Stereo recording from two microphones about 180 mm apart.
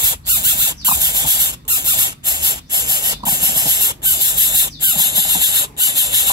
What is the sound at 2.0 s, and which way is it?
Spray, 20° right (ahead or behind).